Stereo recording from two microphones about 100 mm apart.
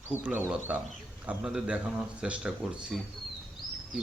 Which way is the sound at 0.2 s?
20° right (ahead or behind).